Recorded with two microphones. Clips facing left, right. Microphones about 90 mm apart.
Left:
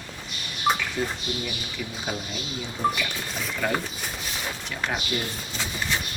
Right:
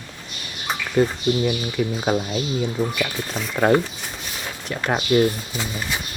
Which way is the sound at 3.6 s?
45° right (ahead or behind).